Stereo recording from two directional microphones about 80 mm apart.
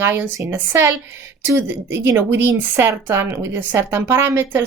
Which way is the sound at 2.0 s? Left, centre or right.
Right.